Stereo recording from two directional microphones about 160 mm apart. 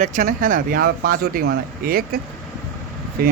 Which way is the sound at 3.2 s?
70° right (ahead or behind).